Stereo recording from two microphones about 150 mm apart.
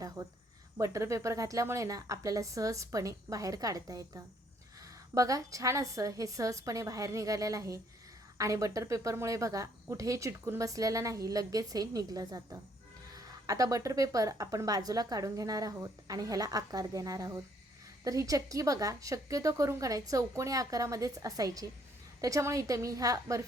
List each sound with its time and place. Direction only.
0.2 s speech: 20° right (ahead or behind)